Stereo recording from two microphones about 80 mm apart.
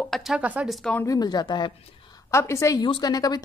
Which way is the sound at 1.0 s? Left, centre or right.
Left.